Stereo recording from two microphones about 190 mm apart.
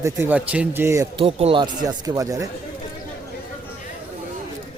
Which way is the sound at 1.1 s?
30° right (ahead or behind).